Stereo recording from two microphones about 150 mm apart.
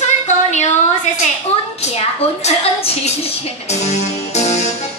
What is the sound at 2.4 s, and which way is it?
Music, 45° left (ahead or behind).